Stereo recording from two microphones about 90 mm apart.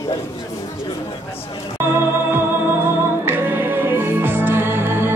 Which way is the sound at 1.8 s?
25° right (ahead or behind).